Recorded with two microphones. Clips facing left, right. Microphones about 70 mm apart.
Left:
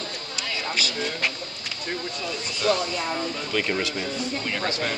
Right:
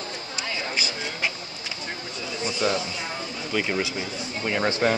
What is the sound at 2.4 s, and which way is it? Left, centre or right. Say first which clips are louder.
Speech: left 1 dB; centre.